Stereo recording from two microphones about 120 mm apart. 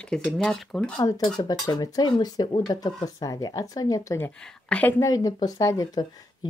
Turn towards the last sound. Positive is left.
turn(degrees=35)  # may be behind; listen again after turning